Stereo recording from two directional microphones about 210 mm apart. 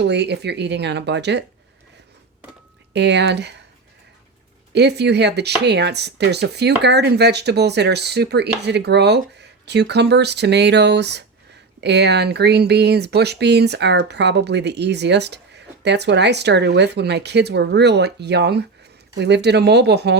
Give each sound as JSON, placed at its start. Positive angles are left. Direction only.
{"t": 0.0, "sound": "speech", "side_deg": -55}
{"t": 2.9, "sound": "speech", "side_deg": -55}
{"t": 4.7, "sound": "speech", "side_deg": -55}